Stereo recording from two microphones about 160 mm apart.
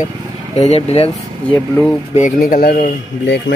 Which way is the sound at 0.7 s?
40° left (ahead or behind).